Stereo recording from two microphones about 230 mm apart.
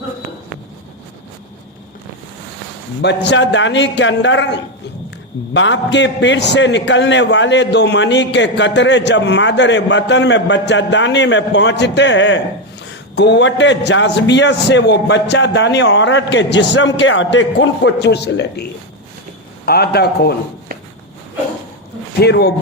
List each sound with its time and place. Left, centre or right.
3.0 s a man's voice: left
22.2 s a man's voice: left